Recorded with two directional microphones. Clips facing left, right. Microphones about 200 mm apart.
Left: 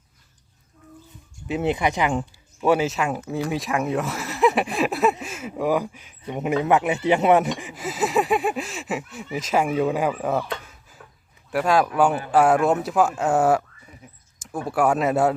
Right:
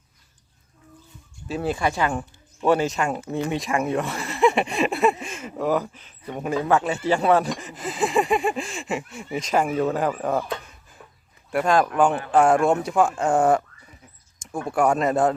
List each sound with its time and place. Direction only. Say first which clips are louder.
1.5 s speech: left 2 dB; 20° left (ahead or behind)
2.6 s speech: even; 5° left (ahead or behind)
7.6 s speech: even; 10° left (ahead or behind)